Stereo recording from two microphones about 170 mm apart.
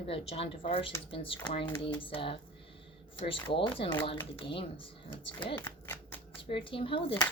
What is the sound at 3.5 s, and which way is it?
Speech, 30° left (ahead or behind).